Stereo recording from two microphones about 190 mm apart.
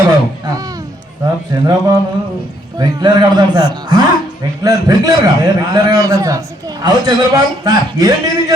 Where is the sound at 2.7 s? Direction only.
20° right (ahead or behind).